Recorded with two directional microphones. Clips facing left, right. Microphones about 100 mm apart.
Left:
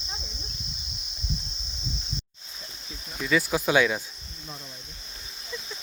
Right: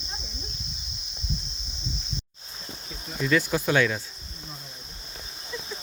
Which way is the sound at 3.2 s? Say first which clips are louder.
Even; 10° left (ahead or behind).